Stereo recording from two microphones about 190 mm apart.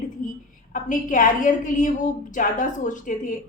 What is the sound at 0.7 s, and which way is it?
A woman's voice, 45° left (ahead or behind).